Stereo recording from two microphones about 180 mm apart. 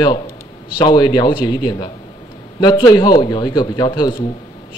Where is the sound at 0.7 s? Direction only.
25° left (ahead or behind).